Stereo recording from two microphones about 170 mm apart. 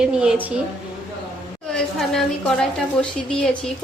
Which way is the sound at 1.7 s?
Centre (ahead or behind).